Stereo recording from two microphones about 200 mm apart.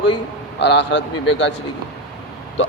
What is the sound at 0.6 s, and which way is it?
Speech, 60° left (ahead or behind).